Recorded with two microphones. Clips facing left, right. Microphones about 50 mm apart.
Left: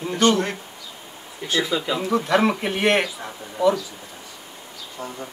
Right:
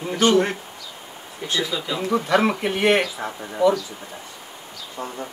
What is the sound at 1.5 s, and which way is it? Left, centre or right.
Speech, centre.